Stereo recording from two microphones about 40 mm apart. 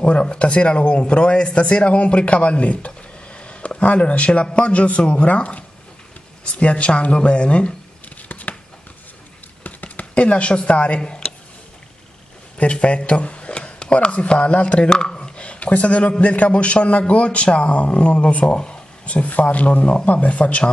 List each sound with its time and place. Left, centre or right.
0.0 s a man's voice: left
8.3 s a sound: left
9.6 s chopping: left
11.0 s speech: left
12.5 s speech: left
14.9 s a man's voice: left